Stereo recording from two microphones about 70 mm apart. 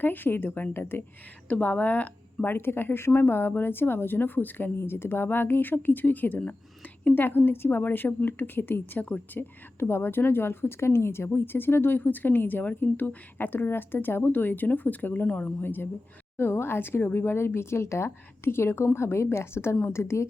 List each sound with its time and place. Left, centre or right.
0.0 s speech: left
1.5 s speech: left